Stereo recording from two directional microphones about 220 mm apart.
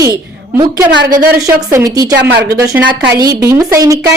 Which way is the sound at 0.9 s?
50° right (ahead or behind).